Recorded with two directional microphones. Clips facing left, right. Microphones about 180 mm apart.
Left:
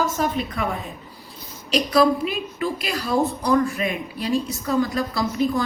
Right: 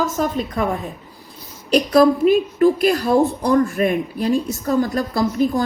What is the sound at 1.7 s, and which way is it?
A woman's voice, 45° right (ahead or behind).